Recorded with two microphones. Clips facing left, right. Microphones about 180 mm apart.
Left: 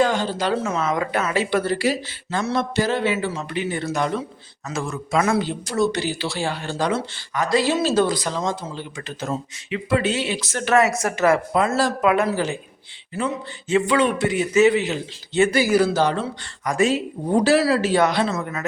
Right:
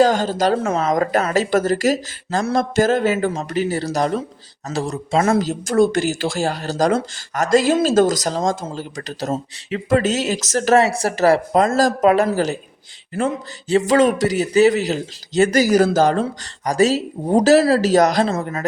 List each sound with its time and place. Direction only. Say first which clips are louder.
0.0 s speech: right 5 dB; 45° right (ahead or behind)
0.8 s speech: right 4 dB; 40° right (ahead or behind)
18.3 s speech: right 3 dB; 30° right (ahead or behind)